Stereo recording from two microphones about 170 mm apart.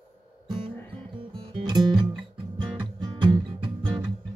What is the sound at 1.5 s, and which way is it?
Music, 30° right (ahead or behind).